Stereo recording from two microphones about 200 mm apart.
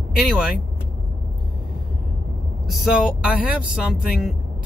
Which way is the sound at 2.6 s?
Centre (ahead or behind).